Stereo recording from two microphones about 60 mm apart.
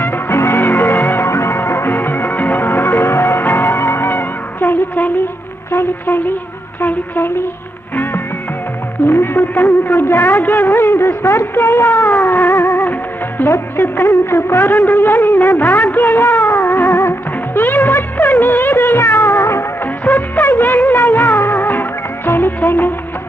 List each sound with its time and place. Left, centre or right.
0.0 s music: left
1.3 s music: left
5.7 s a sound: left
6.8 s a woman's voice: left
9.0 s music: left
9.8 s a man's voice: left
11.9 s music: left
14.1 s a sound: left
14.9 s music of bollywood: left
16.6 s music: left
20.1 s music: left
20.9 s music of bollywood: left
22.3 s music: left